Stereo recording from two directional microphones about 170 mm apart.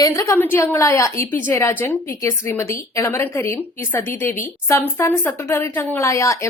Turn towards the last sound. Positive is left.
turn(degrees=15)  # may be behind; listen again after turning